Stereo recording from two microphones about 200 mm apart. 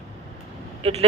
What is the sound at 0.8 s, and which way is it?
Speech, 30° right (ahead or behind).